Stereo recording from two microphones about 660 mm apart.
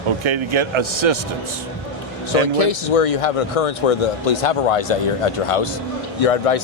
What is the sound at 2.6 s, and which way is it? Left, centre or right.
Speech, left.